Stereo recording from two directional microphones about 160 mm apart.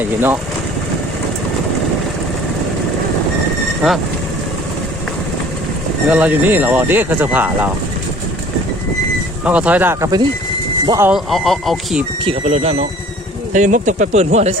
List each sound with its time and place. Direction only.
0.0 s speech: 10° right (ahead or behind)
3.8 s speech: 5° right (ahead or behind)
6.1 s speech: 10° right (ahead or behind)
9.4 s speech: 10° right (ahead or behind)
11.1 s speech: centre (ahead or behind)
12.2 s speech: 40° right (ahead or behind)